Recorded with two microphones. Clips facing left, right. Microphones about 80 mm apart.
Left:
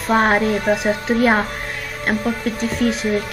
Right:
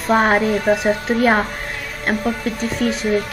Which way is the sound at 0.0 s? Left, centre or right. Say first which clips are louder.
Right 1 dB; centre.